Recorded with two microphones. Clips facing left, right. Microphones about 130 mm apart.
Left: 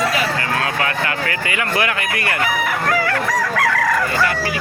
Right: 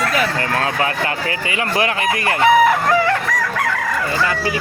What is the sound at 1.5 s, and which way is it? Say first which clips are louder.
Fowl: right 2 dB; 25° right (ahead or behind).